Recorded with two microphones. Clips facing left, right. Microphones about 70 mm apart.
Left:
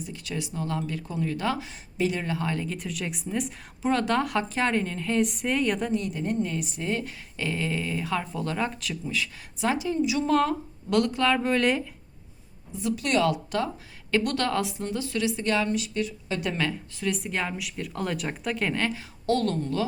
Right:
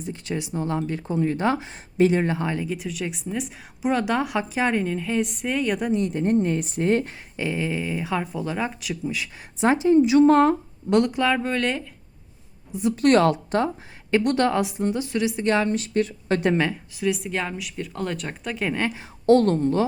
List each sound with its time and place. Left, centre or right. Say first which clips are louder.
0.0 s speech: right 4 dB; right
2.6 s a woman's voice: right 4 dB; centre
5.9 s speech: right 6 dB; right
7.3 s speech: right 3 dB; centre
11.4 s speech: left 1 dB; centre
13.0 s speech: right 7 dB; right
14.1 s speech: right 5 dB; right
15.5 s speech: right 4 dB; right
17.0 s speech: right 4 dB; centre
18.8 s a woman's voice: right 2 dB; centre
19.2 s speech: right 8 dB; right